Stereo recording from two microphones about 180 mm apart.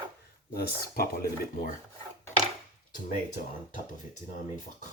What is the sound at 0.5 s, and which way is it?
Speech, 60° left (ahead or behind).